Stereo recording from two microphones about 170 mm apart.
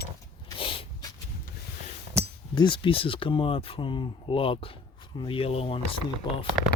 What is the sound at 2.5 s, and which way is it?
Speech, 30° left (ahead or behind).